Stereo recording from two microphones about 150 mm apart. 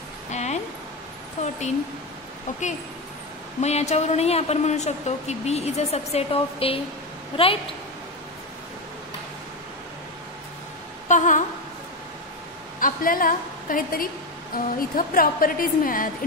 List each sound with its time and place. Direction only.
0.3 s music: 50° left (ahead or behind)
1.4 s a woman's voice: 50° left (ahead or behind)
3.6 s a woman's voice: 45° left (ahead or behind)
11.1 s a sound: 55° left (ahead or behind)
12.8 s a woman's voice: 70° left (ahead or behind)